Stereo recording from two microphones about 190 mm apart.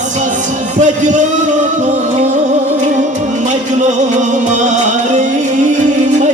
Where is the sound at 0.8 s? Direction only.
40° right (ahead or behind).